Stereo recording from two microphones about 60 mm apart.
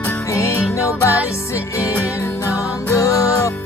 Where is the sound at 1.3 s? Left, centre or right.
Left.